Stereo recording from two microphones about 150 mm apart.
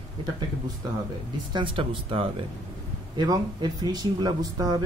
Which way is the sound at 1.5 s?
35° right (ahead or behind).